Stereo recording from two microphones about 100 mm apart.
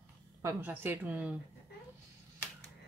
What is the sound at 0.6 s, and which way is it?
Speech, 15° right (ahead or behind).